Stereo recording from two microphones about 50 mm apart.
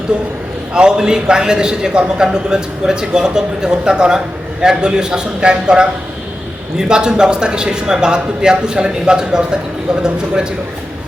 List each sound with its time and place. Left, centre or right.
0.1 s a man's voice: right